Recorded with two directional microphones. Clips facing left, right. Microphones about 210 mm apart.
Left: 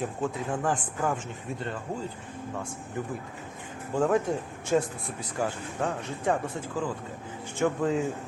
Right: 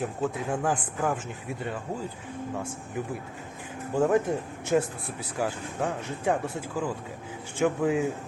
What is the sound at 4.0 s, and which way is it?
Speech, 5° right (ahead or behind).